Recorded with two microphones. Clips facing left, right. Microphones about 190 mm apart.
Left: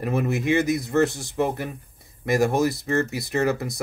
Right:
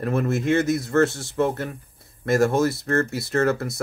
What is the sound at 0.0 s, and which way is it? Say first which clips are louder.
Speech: right 1 dB; 15° left (ahead or behind).